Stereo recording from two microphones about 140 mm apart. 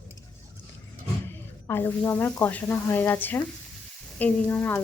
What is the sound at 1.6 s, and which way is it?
A woman's voice, 15° left (ahead or behind).